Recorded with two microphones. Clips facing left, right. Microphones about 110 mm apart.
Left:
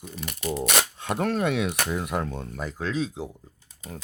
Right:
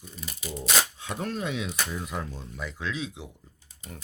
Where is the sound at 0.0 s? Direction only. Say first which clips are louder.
Left 8 dB; 70° left (ahead or behind).